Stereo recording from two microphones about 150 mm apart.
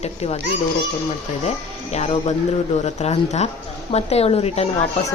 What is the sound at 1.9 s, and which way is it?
Speech, 45° left (ahead or behind).